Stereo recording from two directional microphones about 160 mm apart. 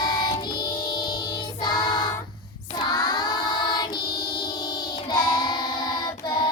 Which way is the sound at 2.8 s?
25° left (ahead or behind).